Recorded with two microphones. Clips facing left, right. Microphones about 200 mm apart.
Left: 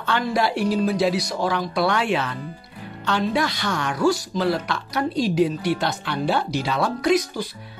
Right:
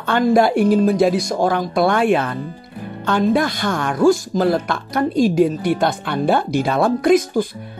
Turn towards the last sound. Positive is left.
turn(degrees=-50)  # may be behind; listen again after turning